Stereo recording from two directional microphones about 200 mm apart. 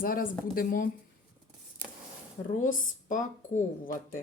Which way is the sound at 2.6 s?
40° left (ahead or behind).